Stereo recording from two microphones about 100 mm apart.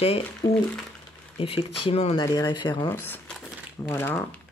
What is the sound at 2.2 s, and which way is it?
Speech, 40° left (ahead or behind).